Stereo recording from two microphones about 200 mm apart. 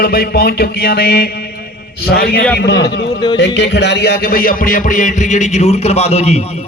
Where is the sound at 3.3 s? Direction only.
60° left (ahead or behind); by 6.6 s 30° left (ahead or behind).